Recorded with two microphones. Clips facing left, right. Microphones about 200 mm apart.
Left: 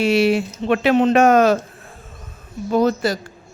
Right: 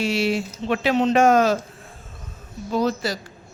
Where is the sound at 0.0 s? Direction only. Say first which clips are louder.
Left 6 dB; 60° left (ahead or behind).